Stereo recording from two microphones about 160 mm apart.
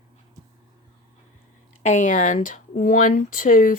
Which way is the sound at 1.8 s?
50° left (ahead or behind).